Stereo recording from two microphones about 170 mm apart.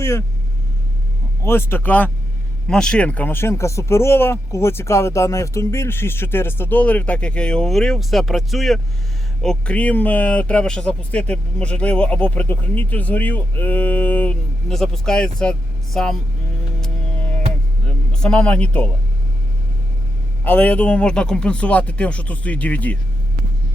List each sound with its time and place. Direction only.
0.0 s speech: 15° left (ahead or behind)
1.5 s speech: 15° left (ahead or behind)
16.8 s music: 10° left (ahead or behind)
17.8 s speech: 5° left (ahead or behind)
20.4 s speech: 10° left (ahead or behind)